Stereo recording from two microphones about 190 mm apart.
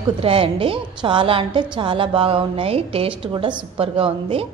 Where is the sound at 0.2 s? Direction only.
30° right (ahead or behind).